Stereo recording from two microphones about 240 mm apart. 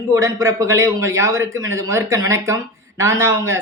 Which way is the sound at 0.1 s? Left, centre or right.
Centre.